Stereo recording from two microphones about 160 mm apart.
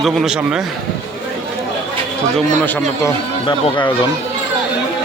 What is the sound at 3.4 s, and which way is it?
Speech, 30° left (ahead or behind).